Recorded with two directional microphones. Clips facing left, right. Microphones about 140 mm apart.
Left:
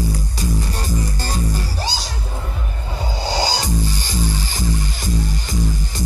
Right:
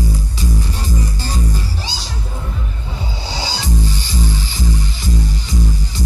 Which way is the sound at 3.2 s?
45° left (ahead or behind).